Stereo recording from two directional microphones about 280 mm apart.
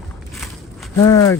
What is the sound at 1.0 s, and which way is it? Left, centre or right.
Speech, centre.